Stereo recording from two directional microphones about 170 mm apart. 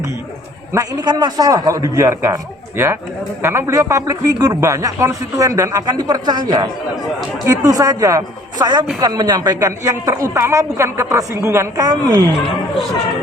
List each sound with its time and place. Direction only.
0.7 s a woman's voice: 20° right (ahead or behind)